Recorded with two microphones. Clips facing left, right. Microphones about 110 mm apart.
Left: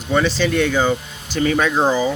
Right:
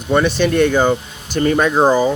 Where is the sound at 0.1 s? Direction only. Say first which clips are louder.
Right 3 dB; 50° right (ahead or behind).